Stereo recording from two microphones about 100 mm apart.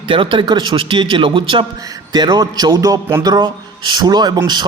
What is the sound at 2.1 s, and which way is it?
Speech, 45° right (ahead or behind).